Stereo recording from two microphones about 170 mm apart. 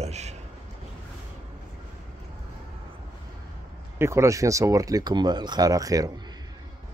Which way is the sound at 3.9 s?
15° right (ahead or behind).